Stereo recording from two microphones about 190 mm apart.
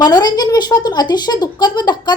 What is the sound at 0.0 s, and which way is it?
A woman's voice, 20° left (ahead or behind).